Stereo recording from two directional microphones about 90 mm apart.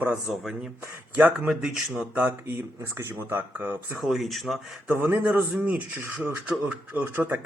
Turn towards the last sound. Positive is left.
turn(degrees=-20)  # may be behind; listen again after turning